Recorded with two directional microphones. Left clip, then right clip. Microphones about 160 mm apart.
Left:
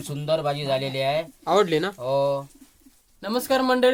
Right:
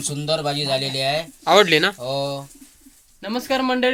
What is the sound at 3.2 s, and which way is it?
Speech, 20° left (ahead or behind).